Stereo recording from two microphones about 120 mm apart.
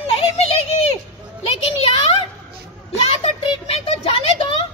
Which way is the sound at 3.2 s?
60° left (ahead or behind).